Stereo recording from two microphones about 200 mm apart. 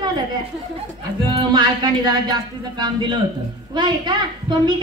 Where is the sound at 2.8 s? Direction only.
20° right (ahead or behind).